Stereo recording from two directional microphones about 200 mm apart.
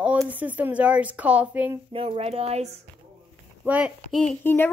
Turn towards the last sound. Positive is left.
turn(degrees=10)  # may be behind; listen again after turning